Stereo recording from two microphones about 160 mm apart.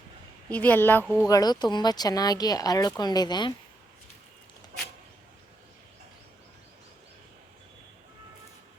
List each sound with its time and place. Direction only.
0.5 s a woman's voice: 10° left (ahead or behind)
1.0 s speech: 5° right (ahead or behind)
1.3 s speech: 25° left (ahead or behind)